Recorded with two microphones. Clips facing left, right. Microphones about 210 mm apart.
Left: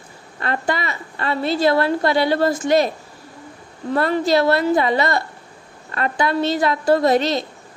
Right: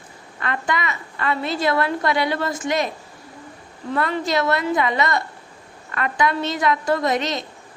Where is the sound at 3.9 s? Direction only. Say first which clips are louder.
Left 5 dB; 35° left (ahead or behind).